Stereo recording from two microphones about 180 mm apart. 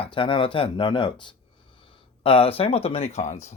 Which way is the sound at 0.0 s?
30° left (ahead or behind).